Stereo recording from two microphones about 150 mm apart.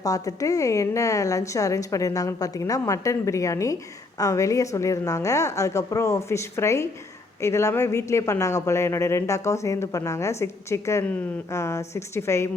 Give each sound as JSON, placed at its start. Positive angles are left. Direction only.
{"t": 0.0, "sound": "a woman's voice", "side_deg": 25}